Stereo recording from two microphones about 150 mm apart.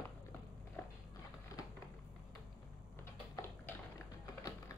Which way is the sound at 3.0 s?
15° left (ahead or behind).